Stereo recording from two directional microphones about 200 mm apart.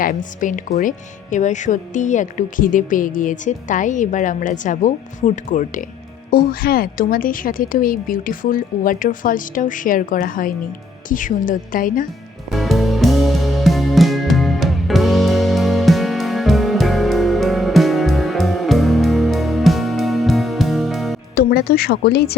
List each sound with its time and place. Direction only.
0.0 s a woman's voice: 40° left (ahead or behind)
12.5 s music: centre (ahead or behind)
21.3 s a woman's voice: 50° left (ahead or behind)